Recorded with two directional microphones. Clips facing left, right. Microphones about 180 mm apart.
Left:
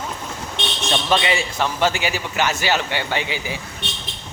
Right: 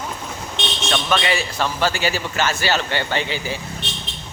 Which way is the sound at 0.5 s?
15° left (ahead or behind).